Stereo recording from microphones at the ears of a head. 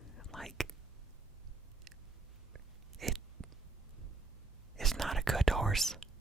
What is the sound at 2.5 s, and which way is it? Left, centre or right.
Chewing, right.